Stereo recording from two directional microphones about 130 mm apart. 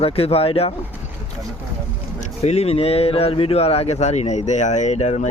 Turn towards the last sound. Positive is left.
turn(degrees=60)  # may be behind; listen again after turning